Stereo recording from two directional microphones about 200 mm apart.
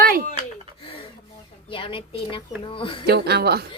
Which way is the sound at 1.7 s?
25° left (ahead or behind).